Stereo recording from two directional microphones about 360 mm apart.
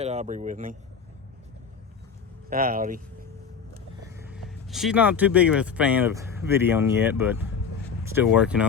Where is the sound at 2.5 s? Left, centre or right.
Right.